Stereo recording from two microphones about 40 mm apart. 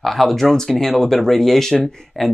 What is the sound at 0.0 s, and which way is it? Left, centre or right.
Speech, centre.